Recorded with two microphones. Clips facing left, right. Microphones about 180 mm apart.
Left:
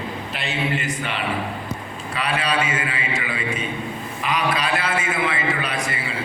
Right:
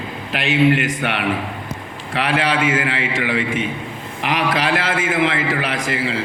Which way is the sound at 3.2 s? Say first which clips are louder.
Right 6 dB; 85° right.